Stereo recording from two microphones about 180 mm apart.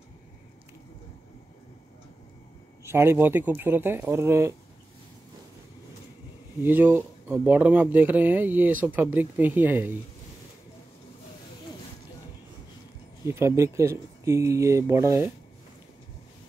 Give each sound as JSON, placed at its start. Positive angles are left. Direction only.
{"t": 2.8, "sound": "speech", "side_deg": -15}
{"t": 6.6, "sound": "speech", "side_deg": -10}
{"t": 13.2, "sound": "speech", "side_deg": -15}